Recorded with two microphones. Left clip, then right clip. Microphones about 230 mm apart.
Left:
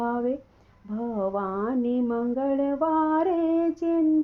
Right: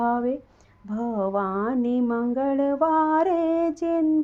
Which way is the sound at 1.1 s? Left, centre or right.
Right.